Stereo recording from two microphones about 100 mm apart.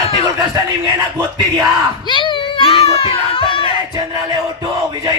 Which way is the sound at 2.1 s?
55° left (ahead or behind).